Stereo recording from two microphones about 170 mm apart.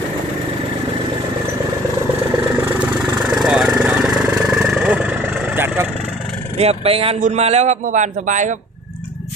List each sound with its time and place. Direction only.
3.2 s vehicle: 5° right (ahead or behind)
6.6 s a man's voice: 35° right (ahead or behind)